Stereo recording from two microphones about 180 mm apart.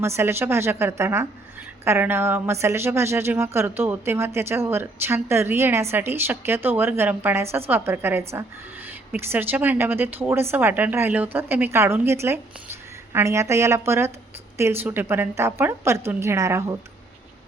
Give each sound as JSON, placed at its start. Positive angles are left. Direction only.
{"t": 0.0, "sound": "a woman's voice", "side_deg": -15}